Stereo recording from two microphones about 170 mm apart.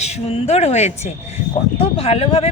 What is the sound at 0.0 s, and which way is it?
A man's voice, 40° left (ahead or behind).